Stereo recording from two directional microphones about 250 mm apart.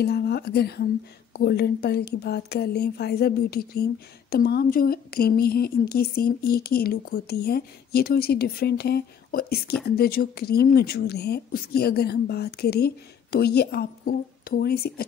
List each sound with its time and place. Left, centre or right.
0.0 s speech: left